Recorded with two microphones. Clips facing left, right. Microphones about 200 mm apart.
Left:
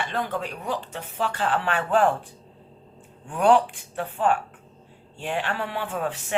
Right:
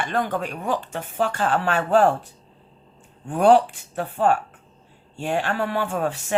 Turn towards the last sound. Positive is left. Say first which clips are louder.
# right 4 dB
turn(degrees=-45)  # may be behind; listen again after turning